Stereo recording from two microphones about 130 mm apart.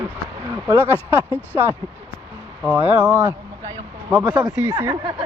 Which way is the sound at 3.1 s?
25° right (ahead or behind).